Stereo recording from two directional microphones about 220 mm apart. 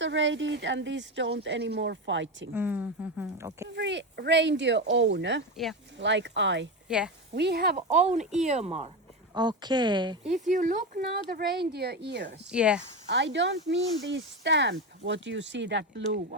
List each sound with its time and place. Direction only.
0.0 s speech: 55° right (ahead or behind)
2.5 s speech: 10° right (ahead or behind)
3.8 s speech: 55° right (ahead or behind)
6.8 s speech: 5° right (ahead or behind)
7.3 s speech: 50° right (ahead or behind)
7.8 s speech: 30° right (ahead or behind)
10.2 s speech: centre (ahead or behind)
10.5 s speech: 35° right (ahead or behind); by 12.4 s 50° right (ahead or behind)
12.5 s speech: 5° right (ahead or behind)
13.1 s speech: 55° right (ahead or behind)